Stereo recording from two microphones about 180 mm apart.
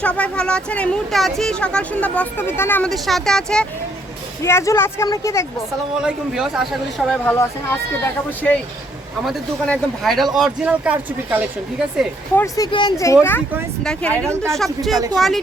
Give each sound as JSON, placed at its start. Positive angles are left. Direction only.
{"t": 0.0, "sound": "speech", "side_deg": 5}
{"t": 2.9, "sound": "speech", "side_deg": 0}
{"t": 4.4, "sound": "speech", "side_deg": 15}
{"t": 6.0, "sound": "speech", "side_deg": -5}
{"t": 7.3, "sound": "speech", "side_deg": 10}
{"t": 9.2, "sound": "speech", "side_deg": 0}
{"t": 12.4, "sound": "speech", "side_deg": 20}
{"t": 13.8, "sound": "speech", "side_deg": 5}
{"t": 14.2, "sound": "speech", "side_deg": -15}
{"t": 14.5, "sound": "speech", "side_deg": 0}